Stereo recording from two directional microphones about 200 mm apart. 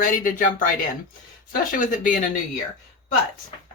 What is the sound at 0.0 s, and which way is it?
Speech, 40° left (ahead or behind).